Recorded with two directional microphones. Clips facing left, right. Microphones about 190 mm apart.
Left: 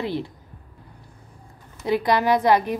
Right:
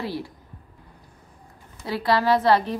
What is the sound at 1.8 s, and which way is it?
Speech, 20° left (ahead or behind).